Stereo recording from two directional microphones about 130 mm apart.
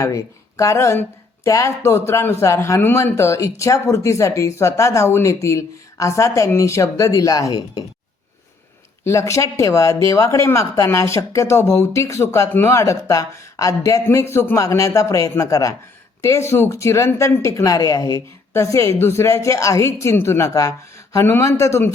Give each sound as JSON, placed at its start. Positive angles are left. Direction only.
{"t": 0.0, "sound": "speech", "side_deg": 25}
{"t": 9.0, "sound": "speech", "side_deg": 25}